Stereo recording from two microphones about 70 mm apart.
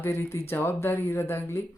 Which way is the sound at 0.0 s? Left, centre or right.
Left.